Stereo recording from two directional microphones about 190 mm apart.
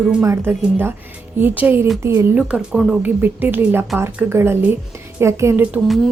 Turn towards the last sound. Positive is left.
turn(degrees=0)  # may be behind; listen again after turning